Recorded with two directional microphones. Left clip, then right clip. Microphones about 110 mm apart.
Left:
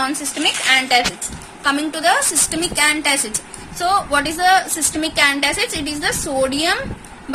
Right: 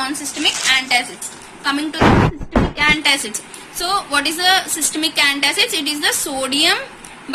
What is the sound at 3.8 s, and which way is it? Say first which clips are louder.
A woman's voice: left 2 dB; 90° left.